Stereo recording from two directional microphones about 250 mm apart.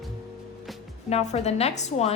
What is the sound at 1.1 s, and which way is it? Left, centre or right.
A woman's voice, left.